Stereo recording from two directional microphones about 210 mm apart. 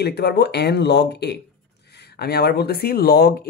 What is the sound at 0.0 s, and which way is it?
Speech, 50° left (ahead or behind).